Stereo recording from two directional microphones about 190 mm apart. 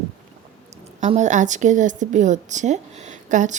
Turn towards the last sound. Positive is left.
turn(degrees=-40)  # may be behind; listen again after turning